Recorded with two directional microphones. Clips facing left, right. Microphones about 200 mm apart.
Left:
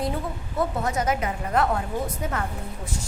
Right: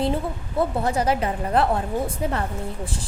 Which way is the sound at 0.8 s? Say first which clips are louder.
Right 3 dB; 30° right (ahead or behind).